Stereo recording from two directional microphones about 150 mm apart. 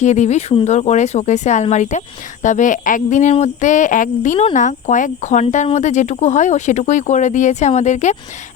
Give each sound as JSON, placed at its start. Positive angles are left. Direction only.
{"t": 0.0, "sound": "speech", "side_deg": 50}